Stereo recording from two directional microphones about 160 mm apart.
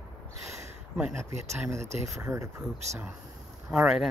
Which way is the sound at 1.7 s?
15° right (ahead or behind).